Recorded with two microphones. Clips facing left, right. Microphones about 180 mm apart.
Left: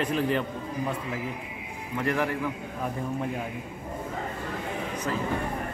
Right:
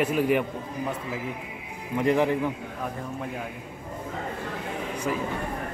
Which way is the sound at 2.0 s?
20° right (ahead or behind).